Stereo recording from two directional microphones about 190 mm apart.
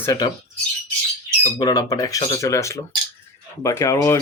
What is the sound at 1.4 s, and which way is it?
Speech, 20° left (ahead or behind).